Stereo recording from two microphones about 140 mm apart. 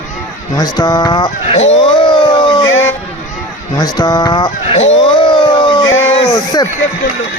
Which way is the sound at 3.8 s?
30° left (ahead or behind).